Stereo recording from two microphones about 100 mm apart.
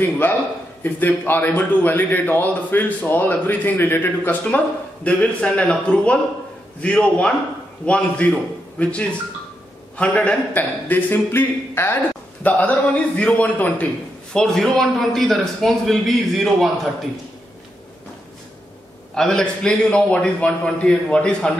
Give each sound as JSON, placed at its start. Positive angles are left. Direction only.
{"t": 0.2, "sound": "a man's voice", "side_deg": 15}
{"t": 19.1, "sound": "a man's voice", "side_deg": 5}